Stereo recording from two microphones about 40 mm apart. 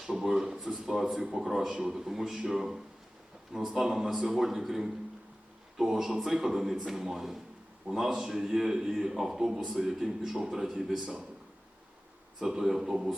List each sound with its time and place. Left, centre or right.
0.0 s a man's voice: centre
12.4 s a man's voice: centre